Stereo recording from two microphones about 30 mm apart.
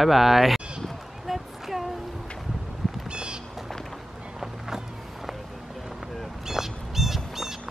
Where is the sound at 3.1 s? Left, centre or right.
Right.